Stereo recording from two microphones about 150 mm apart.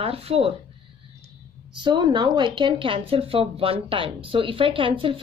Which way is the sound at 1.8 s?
30° right (ahead or behind).